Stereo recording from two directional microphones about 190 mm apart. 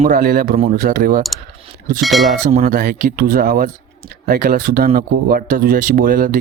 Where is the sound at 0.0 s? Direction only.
45° right (ahead or behind).